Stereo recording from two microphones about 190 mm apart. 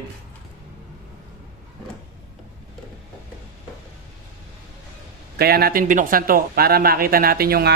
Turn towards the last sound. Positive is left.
turn(degrees=-55)  # may be behind; listen again after turning